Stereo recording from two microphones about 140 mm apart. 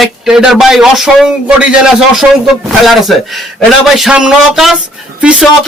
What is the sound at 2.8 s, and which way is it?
Speech, centre (ahead or behind).